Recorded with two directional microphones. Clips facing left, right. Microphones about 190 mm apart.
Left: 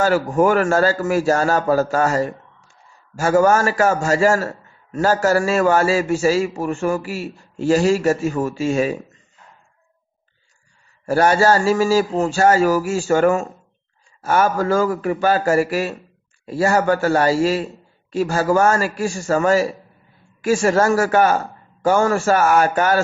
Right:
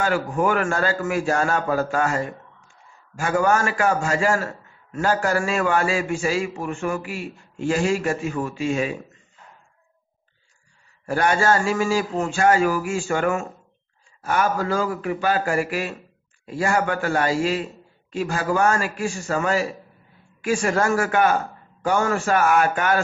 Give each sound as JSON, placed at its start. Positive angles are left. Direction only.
{"t": 0.0, "sound": "a man's voice", "side_deg": 40}
{"t": 11.1, "sound": "a man's voice", "side_deg": 40}